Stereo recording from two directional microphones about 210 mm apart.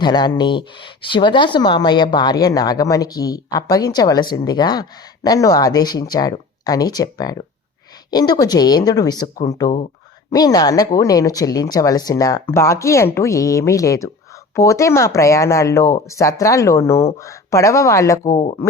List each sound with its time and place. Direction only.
0.0 s speech: 20° left (ahead or behind)